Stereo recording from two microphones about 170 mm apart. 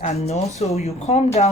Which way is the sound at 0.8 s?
40° left (ahead or behind).